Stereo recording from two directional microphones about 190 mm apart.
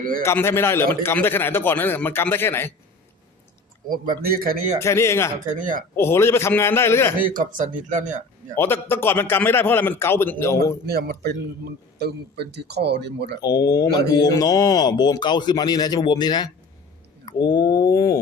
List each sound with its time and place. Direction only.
0.2 s a man's voice: 15° left (ahead or behind)
3.8 s speech: 50° right (ahead or behind)
4.8 s a man's voice: 15° left (ahead or behind)
5.5 s speech: 45° right (ahead or behind)
6.0 s a man's voice: 15° left (ahead or behind)
7.2 s speech: 45° right (ahead or behind)
8.5 s a man's voice: 10° left (ahead or behind)
10.8 s speech: 55° right (ahead or behind)
13.4 s speech: 20° left (ahead or behind)